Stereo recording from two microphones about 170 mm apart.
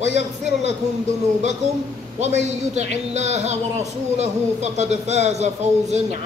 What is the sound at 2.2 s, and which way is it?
Speech, 40° right (ahead or behind).